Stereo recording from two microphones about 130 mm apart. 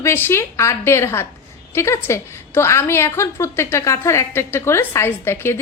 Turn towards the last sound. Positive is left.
turn(degrees=20)  # may be behind; listen again after turning